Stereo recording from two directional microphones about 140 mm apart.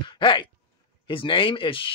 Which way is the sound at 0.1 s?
35° left (ahead or behind).